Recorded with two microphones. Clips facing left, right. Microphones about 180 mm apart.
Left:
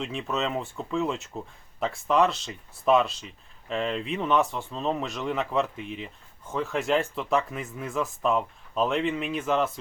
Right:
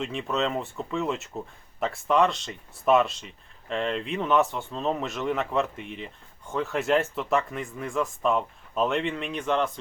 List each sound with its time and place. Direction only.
0.0 s speech: centre (ahead or behind)